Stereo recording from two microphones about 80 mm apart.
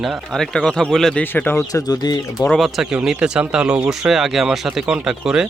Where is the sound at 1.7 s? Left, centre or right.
Left.